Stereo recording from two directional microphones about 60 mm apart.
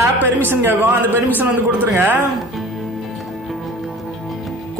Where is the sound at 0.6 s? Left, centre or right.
Right.